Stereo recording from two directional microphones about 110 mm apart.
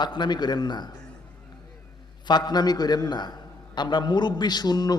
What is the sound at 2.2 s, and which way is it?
A man's voice, 40° left (ahead or behind).